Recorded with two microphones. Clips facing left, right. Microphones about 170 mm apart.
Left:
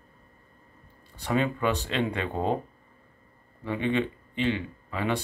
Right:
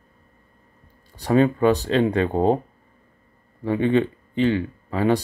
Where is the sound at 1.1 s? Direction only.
35° right (ahead or behind).